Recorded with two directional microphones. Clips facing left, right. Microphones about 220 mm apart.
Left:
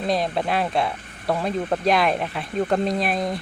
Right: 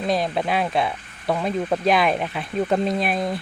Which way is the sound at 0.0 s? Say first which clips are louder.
Right 1 dB; centre (ahead or behind).